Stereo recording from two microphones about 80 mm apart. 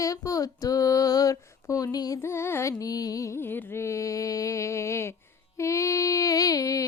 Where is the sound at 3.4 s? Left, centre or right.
Left.